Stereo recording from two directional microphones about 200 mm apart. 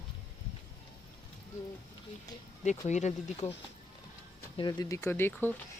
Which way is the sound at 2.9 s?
35° left (ahead or behind).